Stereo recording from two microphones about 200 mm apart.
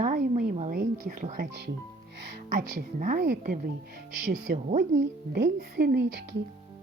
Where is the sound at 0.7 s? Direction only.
45° right (ahead or behind).